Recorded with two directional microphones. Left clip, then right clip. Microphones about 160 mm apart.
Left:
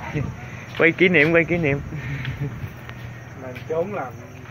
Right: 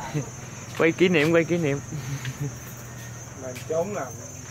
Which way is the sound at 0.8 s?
15° right (ahead or behind).